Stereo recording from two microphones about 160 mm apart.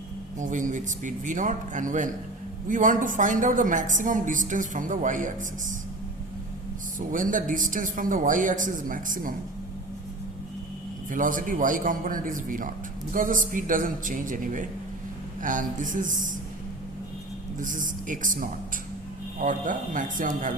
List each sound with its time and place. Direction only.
0.3 s a woman's voice: 55° right (ahead or behind)
7.1 s speech: 55° right (ahead or behind)
11.1 s speech: 55° right (ahead or behind)
17.6 s speech: 55° right (ahead or behind)